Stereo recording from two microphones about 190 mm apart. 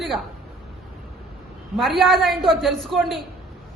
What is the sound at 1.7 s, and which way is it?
A woman's voice, centre (ahead or behind).